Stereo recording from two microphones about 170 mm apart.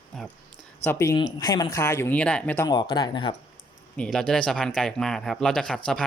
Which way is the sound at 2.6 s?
25° left (ahead or behind).